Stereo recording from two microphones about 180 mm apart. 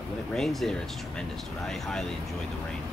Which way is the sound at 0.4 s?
Centre (ahead or behind).